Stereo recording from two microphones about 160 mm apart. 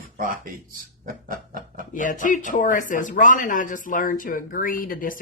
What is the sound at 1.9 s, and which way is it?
Speech, 55° left (ahead or behind).